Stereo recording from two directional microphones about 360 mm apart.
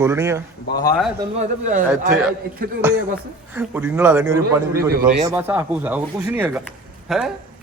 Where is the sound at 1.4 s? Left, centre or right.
Centre.